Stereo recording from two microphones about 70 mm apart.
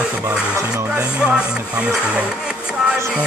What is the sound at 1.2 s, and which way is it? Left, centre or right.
Music, centre.